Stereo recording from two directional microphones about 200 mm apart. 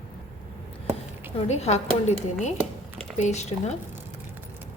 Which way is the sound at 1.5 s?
35° left (ahead or behind).